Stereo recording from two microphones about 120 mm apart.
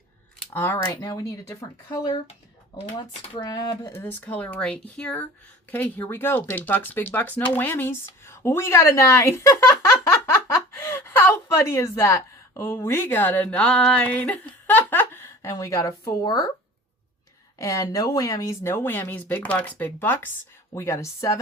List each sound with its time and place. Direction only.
0.5 s speech: 15° left (ahead or behind)
1.0 s speech: 30° left (ahead or behind)
3.4 s speech: 30° left (ahead or behind)
3.9 s a woman's voice: 15° left (ahead or behind); by 16.5 s 35° left (ahead or behind)
17.6 s speech: 30° left (ahead or behind)